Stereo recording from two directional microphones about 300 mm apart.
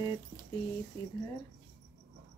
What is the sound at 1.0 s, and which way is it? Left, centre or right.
Speech, centre.